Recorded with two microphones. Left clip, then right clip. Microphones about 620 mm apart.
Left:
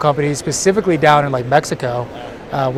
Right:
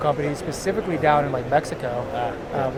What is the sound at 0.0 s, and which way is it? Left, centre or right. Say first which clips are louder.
A man's voice: left 7 dB; left.